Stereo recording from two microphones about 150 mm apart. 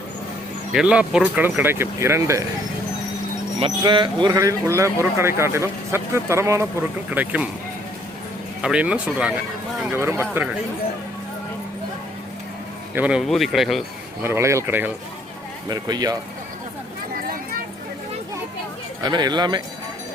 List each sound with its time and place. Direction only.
0.7 s speech: 5° right (ahead or behind)
3.6 s speech: 30° right (ahead or behind)
4.3 s a man's voice: 20° right (ahead or behind)
8.6 s speech: 5° right (ahead or behind)
12.9 s speech: 10° right (ahead or behind)
14.2 s speech: 15° right (ahead or behind)
15.7 s a man's voice: 25° right (ahead or behind)
19.0 s a man's voice: 30° right (ahead or behind)